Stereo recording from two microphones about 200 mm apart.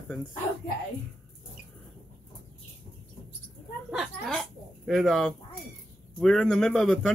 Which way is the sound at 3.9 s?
Centre (ahead or behind).